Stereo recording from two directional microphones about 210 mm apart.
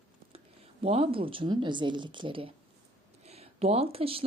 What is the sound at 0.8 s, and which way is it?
Speech, 30° right (ahead or behind).